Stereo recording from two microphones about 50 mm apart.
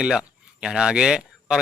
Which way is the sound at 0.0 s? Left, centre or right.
Centre.